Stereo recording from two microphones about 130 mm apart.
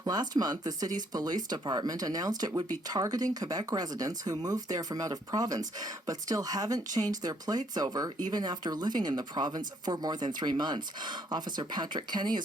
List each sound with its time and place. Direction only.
0.0 s speech: 30° right (ahead or behind)